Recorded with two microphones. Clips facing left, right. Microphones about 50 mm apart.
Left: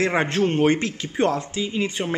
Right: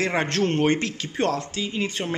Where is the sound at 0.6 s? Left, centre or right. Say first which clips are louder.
Left 2 dB; left.